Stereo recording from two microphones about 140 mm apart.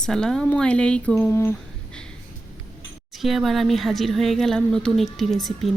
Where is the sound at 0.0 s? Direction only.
5° left (ahead or behind).